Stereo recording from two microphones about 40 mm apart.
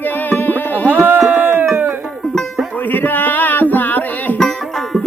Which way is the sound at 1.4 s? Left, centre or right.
Right.